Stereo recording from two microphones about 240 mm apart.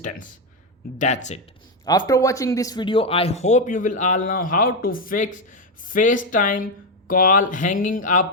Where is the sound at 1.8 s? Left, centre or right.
Centre.